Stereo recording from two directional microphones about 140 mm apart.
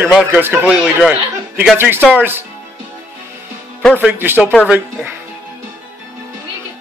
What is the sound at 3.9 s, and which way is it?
Speech, 15° right (ahead or behind).